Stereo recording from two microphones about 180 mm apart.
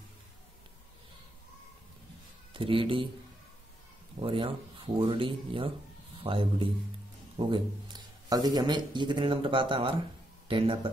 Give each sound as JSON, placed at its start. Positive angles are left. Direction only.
{"t": 2.5, "sound": "a man's voice", "side_deg": -30}
{"t": 4.2, "sound": "a man's voice", "side_deg": -30}